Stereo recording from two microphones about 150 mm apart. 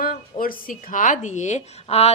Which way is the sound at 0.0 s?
70° left (ahead or behind).